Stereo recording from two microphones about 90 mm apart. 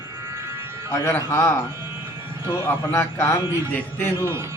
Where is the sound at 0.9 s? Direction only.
30° left (ahead or behind).